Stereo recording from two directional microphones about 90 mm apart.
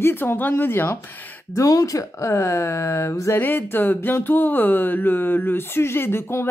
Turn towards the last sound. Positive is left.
turn(degrees=30)  # may be behind; listen again after turning